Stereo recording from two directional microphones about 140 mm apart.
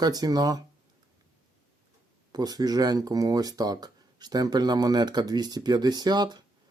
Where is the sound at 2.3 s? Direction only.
30° right (ahead or behind).